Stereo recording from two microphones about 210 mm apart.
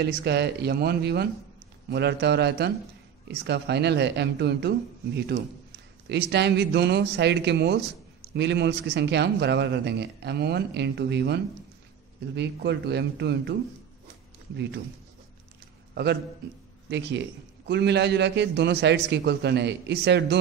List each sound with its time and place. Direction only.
0.0 s a man's voice: 50° right (ahead or behind)
15.9 s a man's voice: 55° right (ahead or behind)
17.6 s a man's voice: 55° right (ahead or behind)